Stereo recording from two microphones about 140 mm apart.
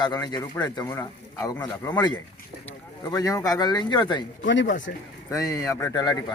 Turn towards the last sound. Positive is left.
turn(degrees=25)  # may be behind; listen again after turning